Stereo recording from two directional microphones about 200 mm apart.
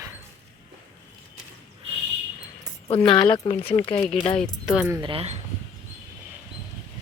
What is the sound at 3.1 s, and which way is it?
Speech, 25° left (ahead or behind).